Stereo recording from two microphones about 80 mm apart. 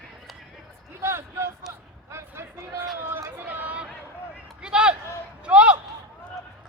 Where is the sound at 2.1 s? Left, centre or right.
Right.